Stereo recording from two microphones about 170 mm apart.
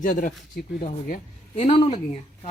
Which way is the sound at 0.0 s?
50° left (ahead or behind).